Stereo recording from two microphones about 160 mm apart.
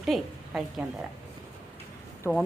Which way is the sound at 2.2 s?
15° left (ahead or behind).